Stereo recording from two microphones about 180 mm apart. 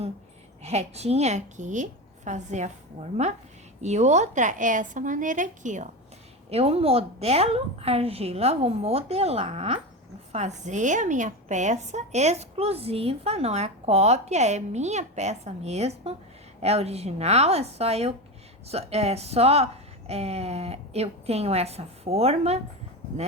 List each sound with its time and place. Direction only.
0.6 s a woman's voice: 35° right (ahead or behind)